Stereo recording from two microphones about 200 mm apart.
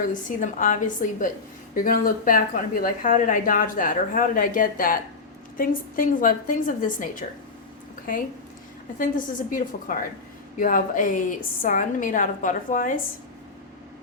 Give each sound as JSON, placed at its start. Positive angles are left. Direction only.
{"t": 0.1, "sound": "a woman's voice", "side_deg": 40}